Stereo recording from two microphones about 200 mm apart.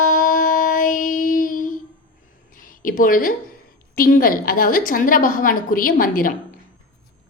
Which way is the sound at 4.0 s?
45° left (ahead or behind).